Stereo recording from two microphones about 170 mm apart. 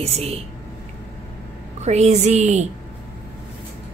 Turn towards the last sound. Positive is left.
turn(degrees=-40)  # may be behind; listen again after turning